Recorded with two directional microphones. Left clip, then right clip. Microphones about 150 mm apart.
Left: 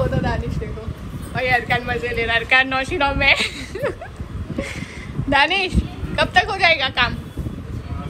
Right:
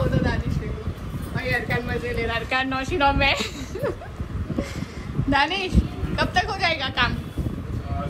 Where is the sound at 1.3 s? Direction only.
Centre (ahead or behind).